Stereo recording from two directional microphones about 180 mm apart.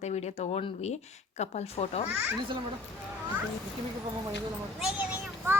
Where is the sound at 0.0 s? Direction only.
35° left (ahead or behind).